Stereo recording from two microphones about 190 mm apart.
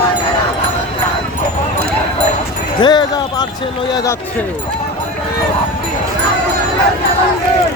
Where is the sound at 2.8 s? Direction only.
20° left (ahead or behind).